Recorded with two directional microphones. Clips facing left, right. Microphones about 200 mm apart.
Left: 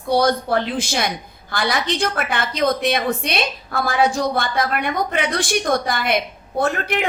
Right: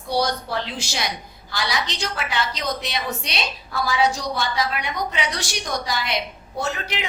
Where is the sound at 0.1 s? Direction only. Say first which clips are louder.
Left 6 dB; 55° left (ahead or behind).